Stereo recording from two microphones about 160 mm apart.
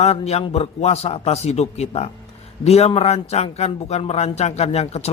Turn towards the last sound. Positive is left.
turn(degrees=40)  # may be behind; listen again after turning